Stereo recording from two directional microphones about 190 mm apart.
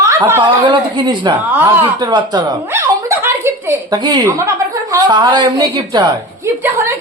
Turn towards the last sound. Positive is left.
turn(degrees=-15)  # may be behind; listen again after turning